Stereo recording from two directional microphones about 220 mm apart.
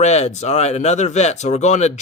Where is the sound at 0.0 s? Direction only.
30° left (ahead or behind).